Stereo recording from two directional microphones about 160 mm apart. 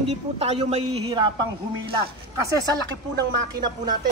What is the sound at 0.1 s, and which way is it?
A man's voice, 40° right (ahead or behind).